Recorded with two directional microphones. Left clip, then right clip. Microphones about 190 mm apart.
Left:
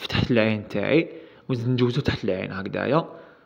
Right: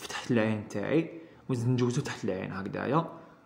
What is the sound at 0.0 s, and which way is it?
A man's voice, 20° left (ahead or behind).